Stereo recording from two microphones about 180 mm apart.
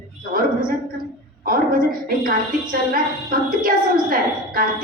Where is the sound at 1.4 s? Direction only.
50° right (ahead or behind).